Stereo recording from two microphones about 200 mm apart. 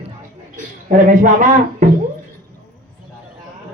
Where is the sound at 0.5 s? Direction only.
40° right (ahead or behind).